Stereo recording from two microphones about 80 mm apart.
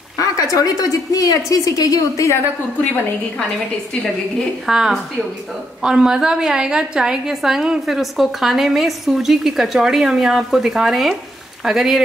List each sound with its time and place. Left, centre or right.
0.2 s a woman's voice: left
4.6 s a woman's voice: centre